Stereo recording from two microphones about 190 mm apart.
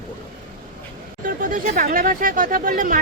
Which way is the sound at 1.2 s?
45° right (ahead or behind).